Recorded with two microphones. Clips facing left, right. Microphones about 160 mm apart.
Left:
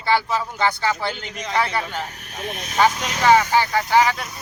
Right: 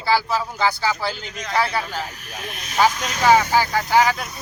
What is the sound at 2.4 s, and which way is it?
Speech, 30° left (ahead or behind).